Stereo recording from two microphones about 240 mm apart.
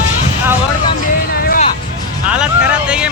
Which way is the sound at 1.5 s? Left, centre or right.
Left.